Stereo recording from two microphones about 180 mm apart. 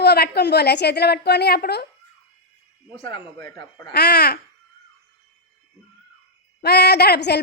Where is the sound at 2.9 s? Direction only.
30° left (ahead or behind).